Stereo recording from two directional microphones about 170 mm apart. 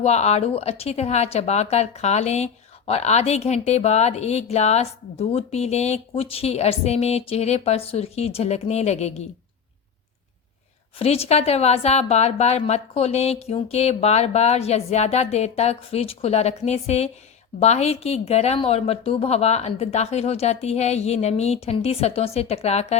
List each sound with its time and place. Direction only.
0.0 s speech: 40° left (ahead or behind)
10.9 s speech: 35° left (ahead or behind)